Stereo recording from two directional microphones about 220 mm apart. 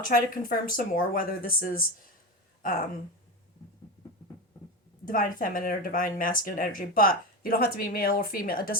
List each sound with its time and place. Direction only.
0.0 s speech: 40° left (ahead or behind)
5.0 s speech: 40° left (ahead or behind)